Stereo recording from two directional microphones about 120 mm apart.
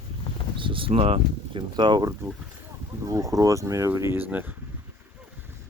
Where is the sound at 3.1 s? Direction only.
30° right (ahead or behind).